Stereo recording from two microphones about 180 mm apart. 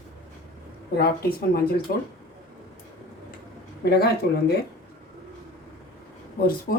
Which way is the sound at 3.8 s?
60° left (ahead or behind).